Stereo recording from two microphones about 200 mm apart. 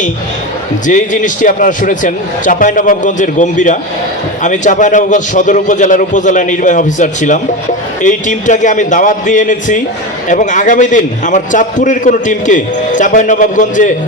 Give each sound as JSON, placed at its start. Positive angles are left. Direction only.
{"t": 0.9, "sound": "a man's voice", "side_deg": 40}